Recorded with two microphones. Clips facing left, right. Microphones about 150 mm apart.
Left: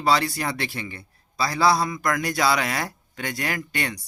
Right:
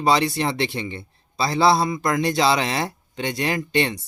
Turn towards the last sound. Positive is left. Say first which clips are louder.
# right 7 dB
turn(degrees=-25)  # may be behind; listen again after turning